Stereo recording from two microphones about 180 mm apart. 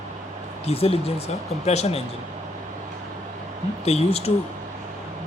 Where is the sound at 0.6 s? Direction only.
35° left (ahead or behind).